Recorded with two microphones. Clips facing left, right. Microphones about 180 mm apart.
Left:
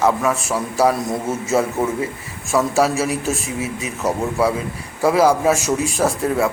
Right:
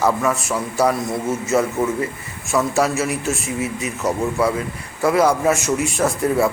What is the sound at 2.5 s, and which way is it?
Speech, 5° left (ahead or behind).